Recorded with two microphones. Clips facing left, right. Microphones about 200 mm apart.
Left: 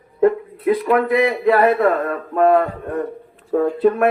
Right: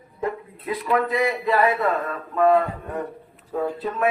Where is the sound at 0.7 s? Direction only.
60° left (ahead or behind).